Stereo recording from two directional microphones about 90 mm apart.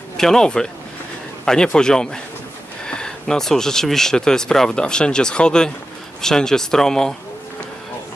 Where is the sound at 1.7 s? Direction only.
5° left (ahead or behind).